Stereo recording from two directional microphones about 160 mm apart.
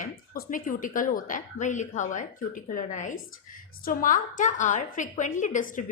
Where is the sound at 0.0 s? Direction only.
55° left (ahead or behind).